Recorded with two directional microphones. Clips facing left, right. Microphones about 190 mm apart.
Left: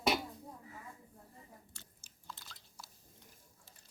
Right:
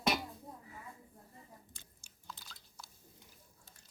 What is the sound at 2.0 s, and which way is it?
Chewing, centre (ahead or behind).